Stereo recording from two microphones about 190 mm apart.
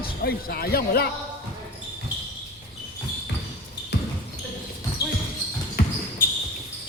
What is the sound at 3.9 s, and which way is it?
Basketball bounce, 60° left (ahead or behind).